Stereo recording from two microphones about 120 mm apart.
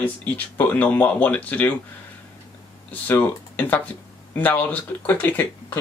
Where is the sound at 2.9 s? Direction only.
15° left (ahead or behind).